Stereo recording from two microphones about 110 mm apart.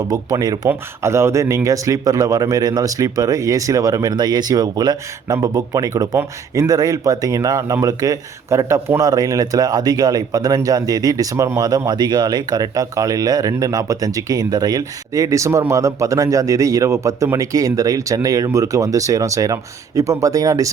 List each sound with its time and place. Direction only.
0.0 s speech: 30° right (ahead or behind)
0.7 s speech: 25° right (ahead or behind)